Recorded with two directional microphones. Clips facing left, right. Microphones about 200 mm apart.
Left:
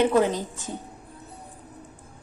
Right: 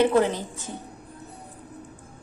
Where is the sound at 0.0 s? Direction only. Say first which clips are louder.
Even; 15° left (ahead or behind).